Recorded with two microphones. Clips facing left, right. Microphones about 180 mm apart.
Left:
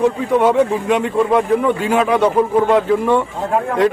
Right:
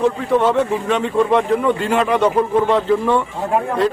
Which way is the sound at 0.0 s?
15° left (ahead or behind).